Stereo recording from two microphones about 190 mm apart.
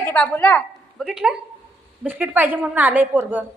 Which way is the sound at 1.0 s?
Centre (ahead or behind).